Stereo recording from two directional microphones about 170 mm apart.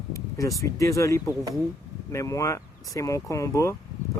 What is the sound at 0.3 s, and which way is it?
Speech, 20° left (ahead or behind).